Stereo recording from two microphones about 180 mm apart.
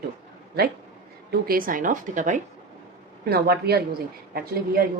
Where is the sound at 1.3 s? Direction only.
55° right (ahead or behind).